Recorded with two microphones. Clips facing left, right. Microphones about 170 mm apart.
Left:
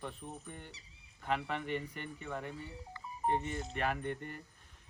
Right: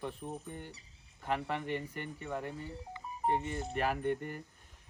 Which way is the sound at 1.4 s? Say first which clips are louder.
Right 2 dB; 40° right (ahead or behind).